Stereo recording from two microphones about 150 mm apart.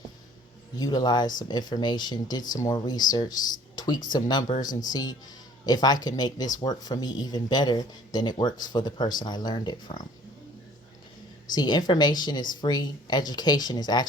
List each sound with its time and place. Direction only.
0.8 s speech: 25° left (ahead or behind)
11.5 s speech: 25° left (ahead or behind)